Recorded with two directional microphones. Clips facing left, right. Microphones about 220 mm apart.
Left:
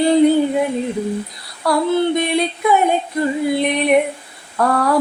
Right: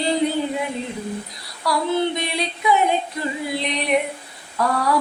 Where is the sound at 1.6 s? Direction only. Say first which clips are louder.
Left 5 dB; 55° left (ahead or behind).